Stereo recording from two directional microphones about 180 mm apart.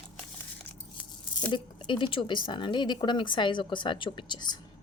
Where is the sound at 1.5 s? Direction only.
25° left (ahead or behind).